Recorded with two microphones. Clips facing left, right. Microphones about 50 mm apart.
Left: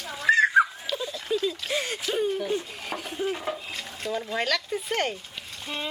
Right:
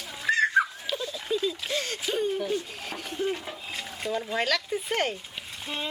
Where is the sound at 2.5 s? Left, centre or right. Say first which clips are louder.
Left 2 dB; centre.